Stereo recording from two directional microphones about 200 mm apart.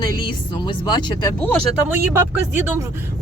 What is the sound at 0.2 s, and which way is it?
Speech, 25° left (ahead or behind).